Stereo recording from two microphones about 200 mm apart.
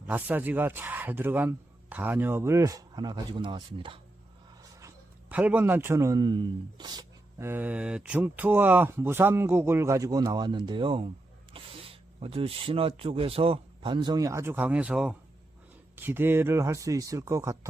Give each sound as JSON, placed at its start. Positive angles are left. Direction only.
{"t": 0.1, "sound": "a man's voice", "side_deg": -10}
{"t": 4.8, "sound": "a man's voice", "side_deg": -10}